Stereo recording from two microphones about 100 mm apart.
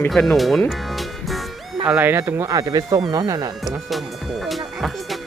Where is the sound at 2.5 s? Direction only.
35° right (ahead or behind).